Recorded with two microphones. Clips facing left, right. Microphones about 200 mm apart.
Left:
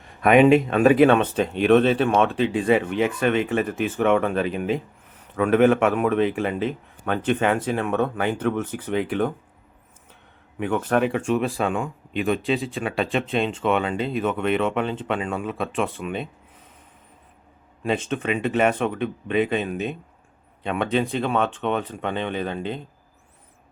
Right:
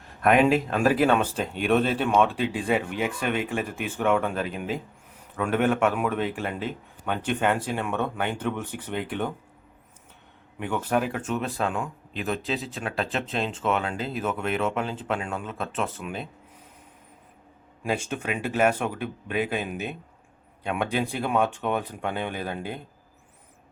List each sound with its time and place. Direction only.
0.0 s speech: centre (ahead or behind)
10.6 s speech: 5° right (ahead or behind)
17.8 s speech: 10° right (ahead or behind)